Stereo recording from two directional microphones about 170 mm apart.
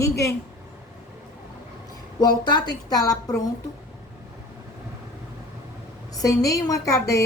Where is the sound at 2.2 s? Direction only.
25° left (ahead or behind).